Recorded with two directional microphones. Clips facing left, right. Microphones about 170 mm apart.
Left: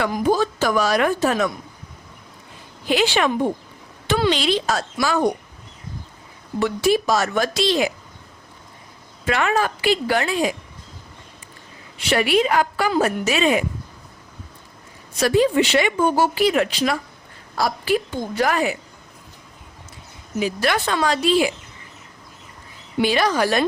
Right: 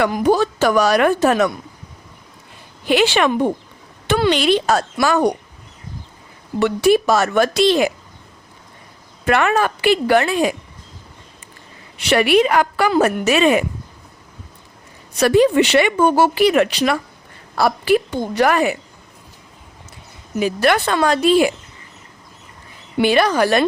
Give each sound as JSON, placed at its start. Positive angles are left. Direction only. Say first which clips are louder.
{"t": 0.0, "sound": "speech", "louder": "right 4 dB", "side_deg": -65}
{"t": 2.8, "sound": "a woman's voice", "louder": "right 4 dB", "side_deg": -70}
{"t": 6.6, "sound": "a woman's voice", "louder": "right 4 dB", "side_deg": -65}
{"t": 9.2, "sound": "a woman's voice", "louder": "right 4 dB", "side_deg": -60}
{"t": 11.9, "sound": "a woman's voice", "louder": "right 4 dB", "side_deg": -70}
{"t": 15.2, "sound": "a woman's voice", "louder": "right 4 dB", "side_deg": -65}
{"t": 20.4, "sound": "a woman's voice", "louder": "right 5 dB", "side_deg": -60}
{"t": 23.0, "sound": "a woman's voice", "louder": "right 4 dB", "side_deg": -60}